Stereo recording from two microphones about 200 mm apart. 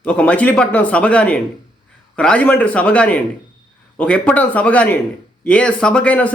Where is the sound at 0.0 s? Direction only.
5° left (ahead or behind).